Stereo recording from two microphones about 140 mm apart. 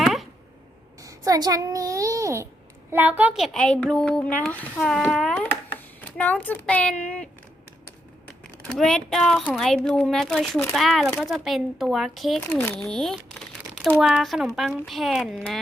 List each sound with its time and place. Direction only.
0.0 s a sound: centre (ahead or behind)
1.0 s a child's voice: 25° right (ahead or behind)
3.3 s speech: centre (ahead or behind)
8.6 s speech: 5° left (ahead or behind)